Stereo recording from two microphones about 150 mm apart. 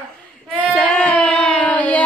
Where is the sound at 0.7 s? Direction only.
5° left (ahead or behind).